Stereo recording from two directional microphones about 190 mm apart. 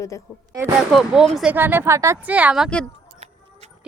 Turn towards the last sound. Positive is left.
turn(degrees=-35)  # may be behind; listen again after turning